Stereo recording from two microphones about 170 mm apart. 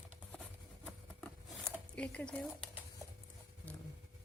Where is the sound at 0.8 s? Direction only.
5° left (ahead or behind).